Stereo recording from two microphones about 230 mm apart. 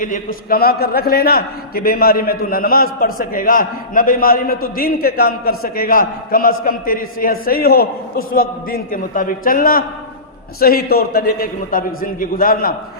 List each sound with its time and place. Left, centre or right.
0.5 s a man's voice: left